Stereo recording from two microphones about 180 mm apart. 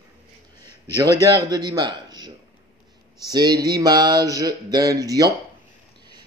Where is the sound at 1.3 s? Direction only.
20° right (ahead or behind).